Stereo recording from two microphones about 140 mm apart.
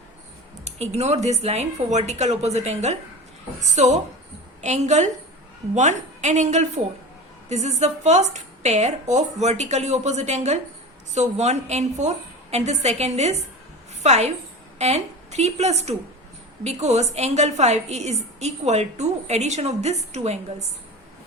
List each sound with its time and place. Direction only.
0.6 s a woman's voice: 50° right (ahead or behind)